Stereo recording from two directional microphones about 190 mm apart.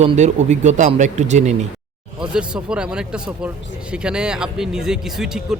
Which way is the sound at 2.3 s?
5° right (ahead or behind).